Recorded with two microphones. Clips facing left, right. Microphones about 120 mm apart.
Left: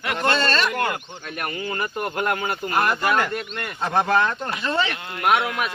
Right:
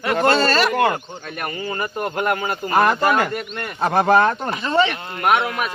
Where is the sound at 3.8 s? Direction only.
60° right (ahead or behind).